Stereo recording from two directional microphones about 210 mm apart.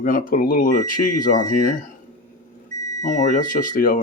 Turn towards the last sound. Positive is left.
turn(degrees=40)  # may be behind; listen again after turning